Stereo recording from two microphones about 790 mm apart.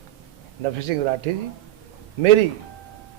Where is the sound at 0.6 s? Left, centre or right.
Right.